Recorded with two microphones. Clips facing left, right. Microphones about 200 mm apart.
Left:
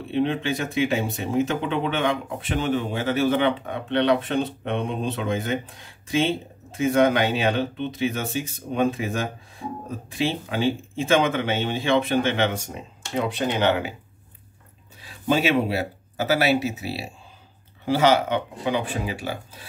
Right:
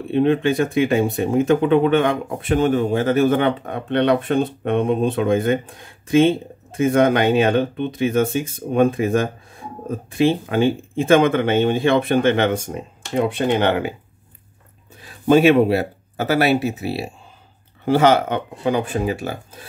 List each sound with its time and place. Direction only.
0.1 s speech: 50° right (ahead or behind)
15.0 s speech: 50° right (ahead or behind)